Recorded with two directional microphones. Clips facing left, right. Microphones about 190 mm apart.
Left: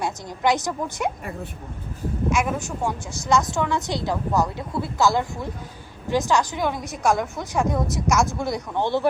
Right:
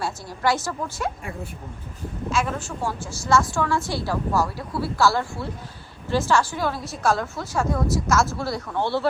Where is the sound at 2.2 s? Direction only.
15° left (ahead or behind).